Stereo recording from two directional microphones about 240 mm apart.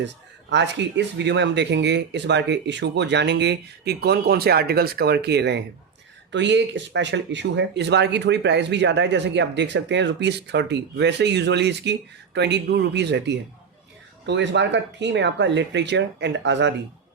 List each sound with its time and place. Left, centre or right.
0.5 s speech: right